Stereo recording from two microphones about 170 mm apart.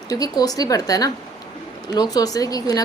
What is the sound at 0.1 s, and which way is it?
A woman's voice, 20° left (ahead or behind).